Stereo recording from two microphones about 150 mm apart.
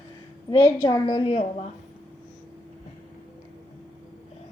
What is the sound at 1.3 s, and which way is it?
Speech, 45° left (ahead or behind).